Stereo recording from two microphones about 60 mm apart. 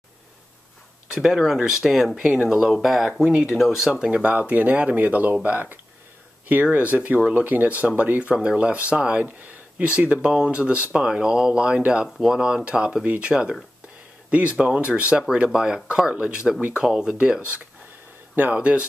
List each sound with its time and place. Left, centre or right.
1.1 s speech: centre
2.1 s speech: centre
3.9 s speech: centre